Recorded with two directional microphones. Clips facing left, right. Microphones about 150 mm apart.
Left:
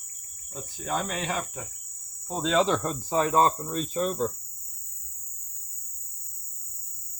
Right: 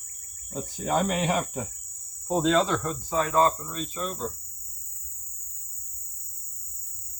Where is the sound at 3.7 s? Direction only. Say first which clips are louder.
Left 5 dB; 45° left (ahead or behind).